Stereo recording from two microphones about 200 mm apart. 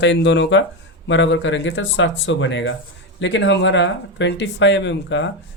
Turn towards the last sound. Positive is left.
turn(degrees=65)  # may be behind; listen again after turning